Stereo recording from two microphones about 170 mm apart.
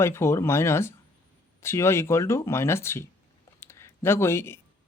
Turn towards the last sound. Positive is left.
turn(degrees=15)  # may be behind; listen again after turning